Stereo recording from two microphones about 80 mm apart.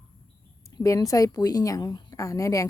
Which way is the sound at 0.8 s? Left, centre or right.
Left.